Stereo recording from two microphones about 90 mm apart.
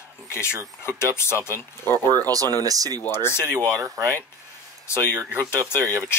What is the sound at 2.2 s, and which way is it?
Speech, 40° right (ahead or behind).